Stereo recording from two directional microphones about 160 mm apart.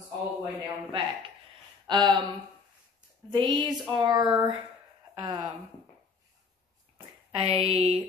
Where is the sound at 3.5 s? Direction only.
25° right (ahead or behind).